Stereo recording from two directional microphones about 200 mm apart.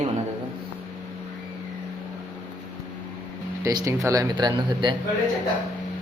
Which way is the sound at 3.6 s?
15° right (ahead or behind).